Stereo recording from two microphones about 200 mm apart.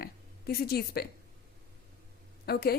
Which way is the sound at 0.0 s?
50° left (ahead or behind).